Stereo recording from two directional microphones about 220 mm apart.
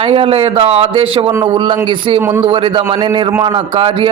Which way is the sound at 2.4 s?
25° right (ahead or behind).